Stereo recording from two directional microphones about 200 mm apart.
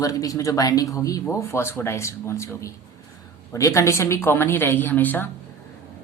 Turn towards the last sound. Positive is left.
turn(degrees=10)  # may be behind; listen again after turning